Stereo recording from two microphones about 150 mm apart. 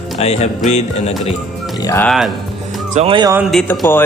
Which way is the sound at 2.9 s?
40° right (ahead or behind).